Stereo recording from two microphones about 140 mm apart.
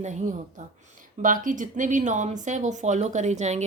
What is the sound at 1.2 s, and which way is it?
Speech, 70° right (ahead or behind).